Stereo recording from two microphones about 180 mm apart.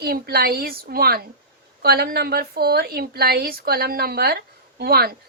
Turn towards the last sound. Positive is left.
turn(degrees=-60)  # may be behind; listen again after turning